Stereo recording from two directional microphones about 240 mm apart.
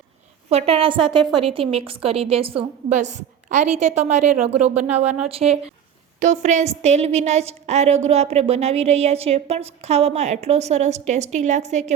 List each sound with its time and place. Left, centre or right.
0.5 s a woman's voice: right